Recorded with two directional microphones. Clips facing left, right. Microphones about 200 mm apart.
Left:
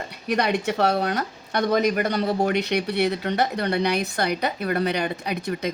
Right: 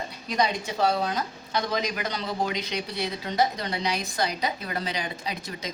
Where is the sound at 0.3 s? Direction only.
70° left (ahead or behind).